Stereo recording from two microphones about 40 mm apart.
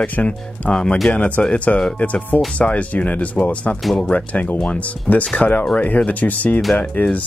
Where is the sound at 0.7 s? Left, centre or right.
Left.